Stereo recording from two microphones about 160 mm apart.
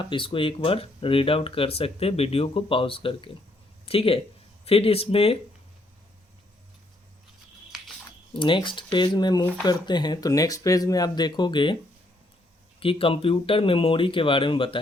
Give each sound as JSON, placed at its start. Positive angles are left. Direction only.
{"t": 0.0, "sound": "speech", "side_deg": 30}
{"t": 8.3, "sound": "speech", "side_deg": 30}
{"t": 12.8, "sound": "speech", "side_deg": 35}